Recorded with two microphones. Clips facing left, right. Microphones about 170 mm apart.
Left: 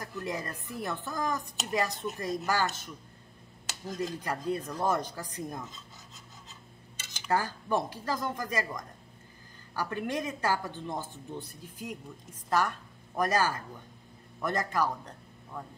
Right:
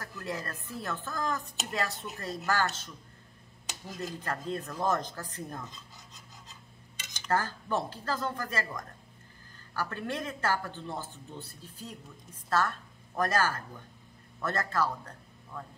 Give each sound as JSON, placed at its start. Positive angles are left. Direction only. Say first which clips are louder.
{"t": 0.0, "sound": "speech", "louder": "left 2 dB", "side_deg": 15}
{"t": 4.0, "sound": "speech", "louder": "left 2 dB", "side_deg": 15}
{"t": 7.2, "sound": "a woman's voice", "louder": "left 1 dB", "side_deg": 15}